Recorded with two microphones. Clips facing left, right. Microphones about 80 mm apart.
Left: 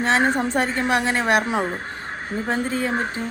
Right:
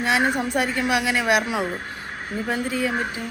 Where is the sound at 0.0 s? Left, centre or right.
Left.